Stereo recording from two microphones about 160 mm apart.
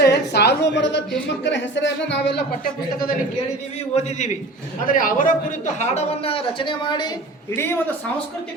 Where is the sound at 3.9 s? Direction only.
45° left (ahead or behind).